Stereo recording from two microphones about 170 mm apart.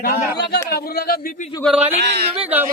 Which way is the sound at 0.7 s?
60° left (ahead or behind).